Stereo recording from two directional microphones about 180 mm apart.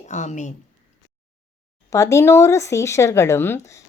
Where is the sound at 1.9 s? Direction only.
15° left (ahead or behind).